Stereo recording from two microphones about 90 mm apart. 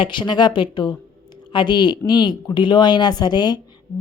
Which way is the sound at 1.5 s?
55° left (ahead or behind).